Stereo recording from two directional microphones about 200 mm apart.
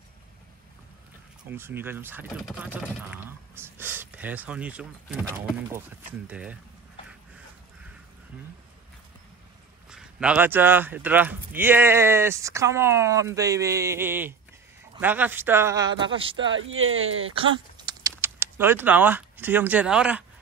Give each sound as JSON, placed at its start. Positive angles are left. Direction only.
{"t": 1.5, "sound": "speech", "side_deg": -10}
{"t": 9.8, "sound": "speech", "side_deg": -5}
{"t": 16.5, "sound": "speech", "side_deg": -80}
{"t": 17.3, "sound": "speech", "side_deg": -25}